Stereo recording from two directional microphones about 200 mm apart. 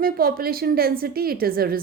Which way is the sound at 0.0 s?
45° right (ahead or behind).